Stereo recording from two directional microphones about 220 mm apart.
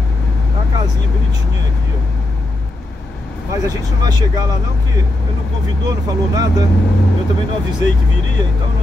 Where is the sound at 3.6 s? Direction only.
15° right (ahead or behind).